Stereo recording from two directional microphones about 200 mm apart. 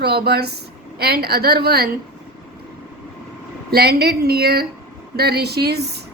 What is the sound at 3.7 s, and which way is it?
A woman's voice, 50° right (ahead or behind).